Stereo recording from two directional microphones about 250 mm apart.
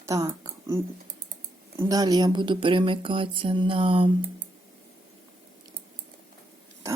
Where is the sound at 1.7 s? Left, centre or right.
Centre.